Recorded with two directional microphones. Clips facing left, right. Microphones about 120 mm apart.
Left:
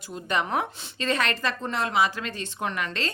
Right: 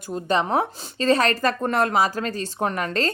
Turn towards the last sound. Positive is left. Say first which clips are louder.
# right 6 dB
turn(degrees=-40)  # may be behind; listen again after turning